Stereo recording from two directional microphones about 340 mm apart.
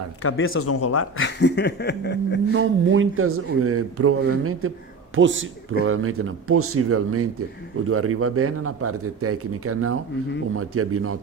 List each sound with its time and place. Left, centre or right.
0.2 s speech: left
2.5 s a man's voice: right